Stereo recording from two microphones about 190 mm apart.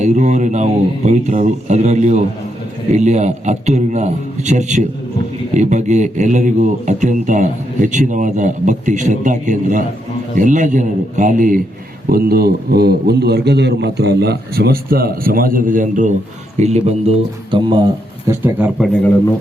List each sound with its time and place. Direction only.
0.0 s a man's voice: 40° right (ahead or behind)
18.3 s speech: 10° right (ahead or behind)